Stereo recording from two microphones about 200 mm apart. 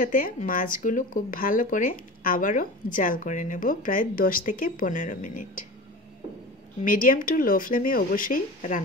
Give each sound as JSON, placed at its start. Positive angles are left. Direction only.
{"t": 0.0, "sound": "speech", "side_deg": 40}
{"t": 6.8, "sound": "speech", "side_deg": 45}